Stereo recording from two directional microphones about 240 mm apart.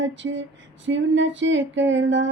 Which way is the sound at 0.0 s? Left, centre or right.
Right.